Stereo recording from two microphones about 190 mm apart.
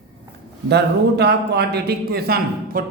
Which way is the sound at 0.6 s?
60° right (ahead or behind).